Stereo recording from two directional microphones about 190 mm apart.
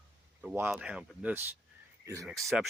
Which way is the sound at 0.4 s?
10° right (ahead or behind).